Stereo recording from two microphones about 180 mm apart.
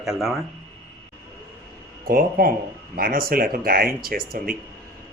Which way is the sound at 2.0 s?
55° right (ahead or behind).